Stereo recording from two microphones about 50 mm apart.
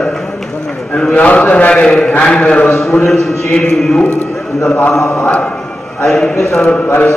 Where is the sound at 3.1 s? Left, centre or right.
Centre.